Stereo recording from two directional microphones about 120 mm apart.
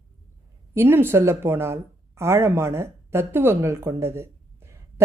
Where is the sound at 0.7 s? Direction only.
20° right (ahead or behind).